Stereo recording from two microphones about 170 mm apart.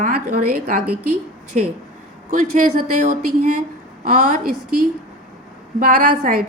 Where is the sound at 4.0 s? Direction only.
50° right (ahead or behind).